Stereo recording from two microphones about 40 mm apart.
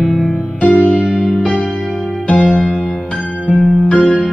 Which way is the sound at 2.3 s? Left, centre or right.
Left.